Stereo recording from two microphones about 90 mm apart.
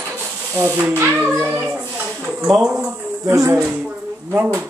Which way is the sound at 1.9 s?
15° right (ahead or behind).